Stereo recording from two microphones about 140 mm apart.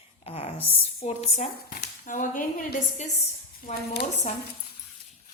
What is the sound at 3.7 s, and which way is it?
Speech, 60° left (ahead or behind).